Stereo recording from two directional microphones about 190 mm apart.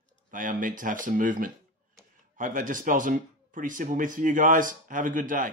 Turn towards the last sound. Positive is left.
turn(degrees=-45)  # may be behind; listen again after turning